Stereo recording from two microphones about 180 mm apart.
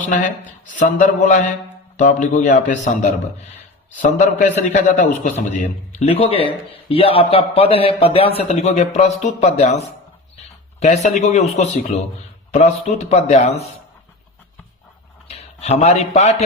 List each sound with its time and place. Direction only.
0.8 s a man's voice: 45° left (ahead or behind)
4.2 s a man's voice: 45° left (ahead or behind)
15.3 s speech: 35° left (ahead or behind)